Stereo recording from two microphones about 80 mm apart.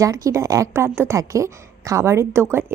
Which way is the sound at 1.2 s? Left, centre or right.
Right.